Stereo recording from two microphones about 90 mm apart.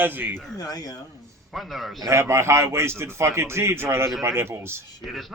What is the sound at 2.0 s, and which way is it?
A man's voice, 30° right (ahead or behind).